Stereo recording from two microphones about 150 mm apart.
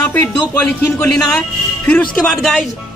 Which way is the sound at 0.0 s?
10° left (ahead or behind).